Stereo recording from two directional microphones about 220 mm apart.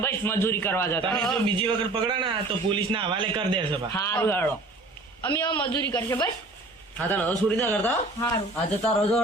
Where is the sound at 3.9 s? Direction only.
10° left (ahead or behind).